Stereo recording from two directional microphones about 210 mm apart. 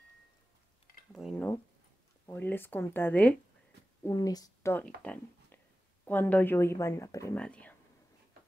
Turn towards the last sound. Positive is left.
turn(degrees=5)  # may be behind; listen again after turning